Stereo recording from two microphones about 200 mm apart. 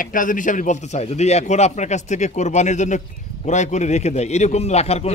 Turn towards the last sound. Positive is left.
turn(degrees=30)  # may be behind; listen again after turning